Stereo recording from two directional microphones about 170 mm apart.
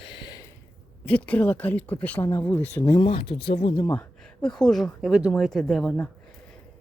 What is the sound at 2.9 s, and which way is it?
Speech, 30° left (ahead or behind).